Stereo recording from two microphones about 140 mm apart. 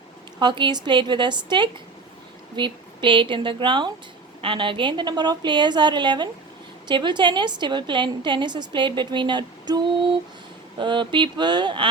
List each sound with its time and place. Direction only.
0.3 s a woman's voice: 35° right (ahead or behind)